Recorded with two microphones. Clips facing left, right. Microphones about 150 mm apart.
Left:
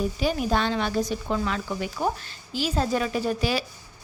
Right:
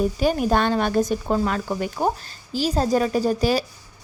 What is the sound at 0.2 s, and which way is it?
Speech, 45° right (ahead or behind).